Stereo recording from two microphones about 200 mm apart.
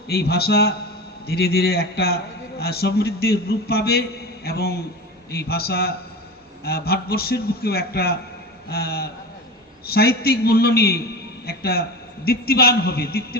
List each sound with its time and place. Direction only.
0.1 s a man's voice: 50° left (ahead or behind)